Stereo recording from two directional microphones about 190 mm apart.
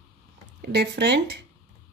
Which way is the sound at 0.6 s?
60° right (ahead or behind).